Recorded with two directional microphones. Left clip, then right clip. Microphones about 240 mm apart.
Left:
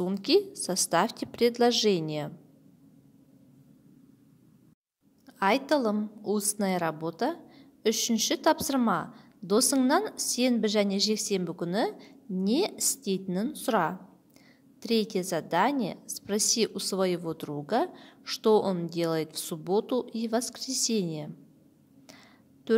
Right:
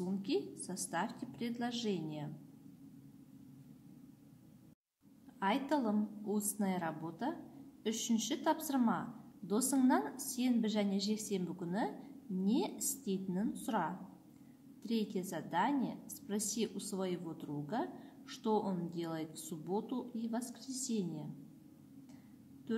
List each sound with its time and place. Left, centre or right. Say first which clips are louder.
0.0 s a woman's voice: left 13 dB; left
5.4 s a woman's voice: left 10 dB; left